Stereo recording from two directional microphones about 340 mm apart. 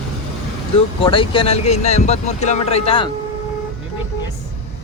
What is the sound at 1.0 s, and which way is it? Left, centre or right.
Speech, centre.